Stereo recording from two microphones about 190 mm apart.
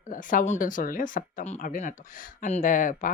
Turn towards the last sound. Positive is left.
turn(degrees=45)  # may be behind; listen again after turning